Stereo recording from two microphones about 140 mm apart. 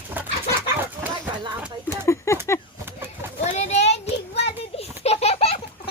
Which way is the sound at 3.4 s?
50° left (ahead or behind).